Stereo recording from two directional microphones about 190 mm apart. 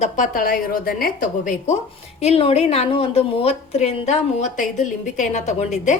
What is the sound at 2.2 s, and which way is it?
A woman's voice, 30° left (ahead or behind).